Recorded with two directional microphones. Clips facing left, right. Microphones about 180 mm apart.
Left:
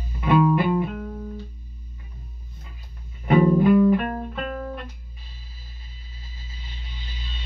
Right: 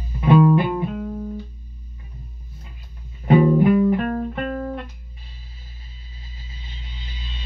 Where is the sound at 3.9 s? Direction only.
35° right (ahead or behind).